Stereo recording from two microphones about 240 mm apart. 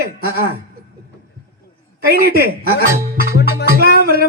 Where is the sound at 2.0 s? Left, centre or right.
Right.